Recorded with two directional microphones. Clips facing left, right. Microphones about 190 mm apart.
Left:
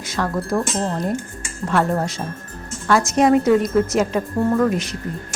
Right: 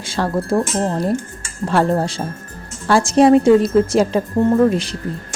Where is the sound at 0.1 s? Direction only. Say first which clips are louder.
Right 3 dB; 30° right (ahead or behind).